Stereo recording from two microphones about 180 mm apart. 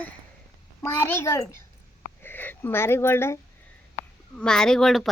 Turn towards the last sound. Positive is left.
turn(degrees=0)  # may be behind; listen again after turning